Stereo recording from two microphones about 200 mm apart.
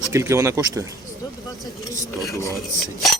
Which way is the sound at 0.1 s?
15° right (ahead or behind).